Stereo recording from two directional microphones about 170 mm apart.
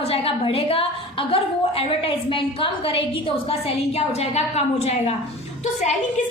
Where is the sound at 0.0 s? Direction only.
35° left (ahead or behind).